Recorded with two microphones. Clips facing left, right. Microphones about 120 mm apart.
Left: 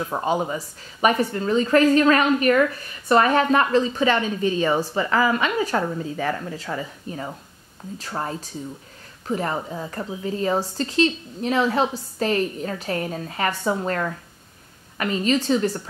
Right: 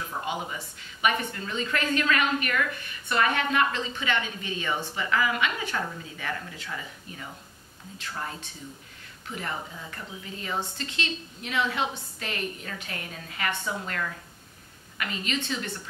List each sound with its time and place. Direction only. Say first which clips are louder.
0.2 s a woman's voice: left 10 dB; 35° left (ahead or behind)